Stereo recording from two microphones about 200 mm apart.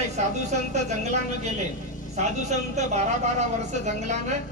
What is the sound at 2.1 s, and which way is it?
A man's voice, 35° right (ahead or behind).